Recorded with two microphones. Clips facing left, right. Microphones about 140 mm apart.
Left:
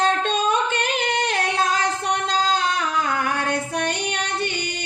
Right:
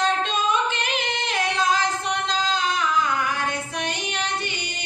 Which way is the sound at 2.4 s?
40° left (ahead or behind).